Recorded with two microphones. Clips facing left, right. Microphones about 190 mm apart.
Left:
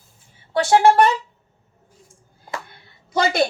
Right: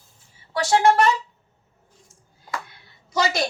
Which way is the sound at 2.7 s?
55° left (ahead or behind).